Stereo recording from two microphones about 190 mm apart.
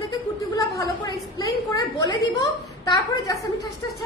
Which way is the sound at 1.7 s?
20° left (ahead or behind).